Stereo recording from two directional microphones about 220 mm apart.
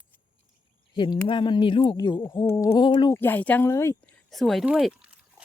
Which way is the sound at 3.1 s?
10° left (ahead or behind).